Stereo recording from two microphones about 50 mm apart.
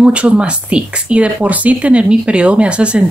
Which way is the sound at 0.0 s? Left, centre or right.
Right.